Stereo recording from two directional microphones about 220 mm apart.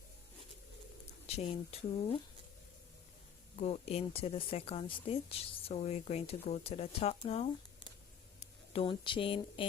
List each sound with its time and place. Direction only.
1.3 s speech: 25° left (ahead or behind)
3.6 s speech: 30° left (ahead or behind)